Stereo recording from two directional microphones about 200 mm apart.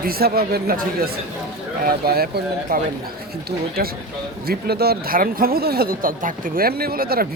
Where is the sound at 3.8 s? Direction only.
50° right (ahead or behind).